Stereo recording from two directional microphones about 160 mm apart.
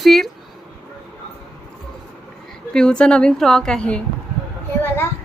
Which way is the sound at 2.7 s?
5° left (ahead or behind).